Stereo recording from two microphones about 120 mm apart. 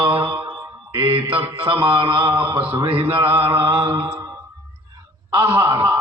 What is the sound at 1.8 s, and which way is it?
A man's voice, 40° right (ahead or behind).